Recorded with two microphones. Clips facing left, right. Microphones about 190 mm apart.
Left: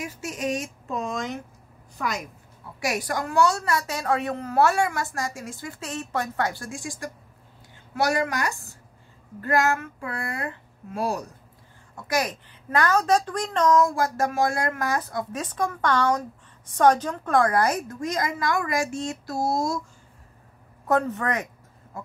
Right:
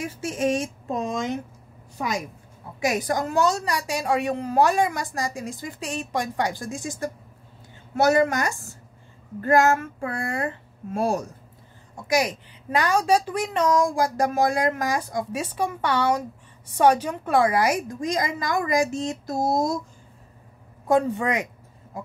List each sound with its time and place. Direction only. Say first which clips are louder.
0.2 s speech: right 5 dB; 25° right (ahead or behind)
2.8 s a woman's voice: right 3 dB; 20° right (ahead or behind)
9.7 s speech: right 4 dB; 30° right (ahead or behind)
11.0 s speech: right 3 dB; 50° right (ahead or behind)
11.9 s a woman's voice: right 3 dB; 15° right (ahead or behind)
20.8 s a woman's voice: right 3 dB; 15° right (ahead or behind)